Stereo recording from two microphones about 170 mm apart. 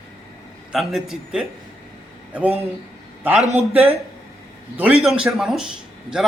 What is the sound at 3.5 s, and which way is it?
Speech, 35° right (ahead or behind).